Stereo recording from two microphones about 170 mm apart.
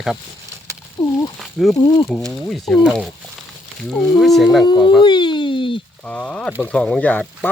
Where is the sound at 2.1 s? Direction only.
Centre (ahead or behind).